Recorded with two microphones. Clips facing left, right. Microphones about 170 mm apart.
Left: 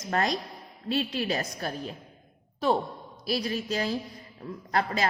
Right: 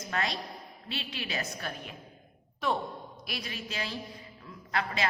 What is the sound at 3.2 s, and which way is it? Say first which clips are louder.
Speech: left 12 dB; 35° left (ahead or behind).